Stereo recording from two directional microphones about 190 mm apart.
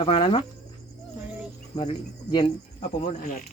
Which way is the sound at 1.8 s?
25° left (ahead or behind).